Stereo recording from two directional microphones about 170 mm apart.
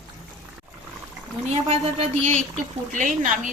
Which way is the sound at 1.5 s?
35° right (ahead or behind).